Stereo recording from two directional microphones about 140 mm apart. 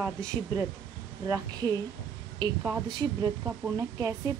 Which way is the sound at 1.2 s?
25° right (ahead or behind).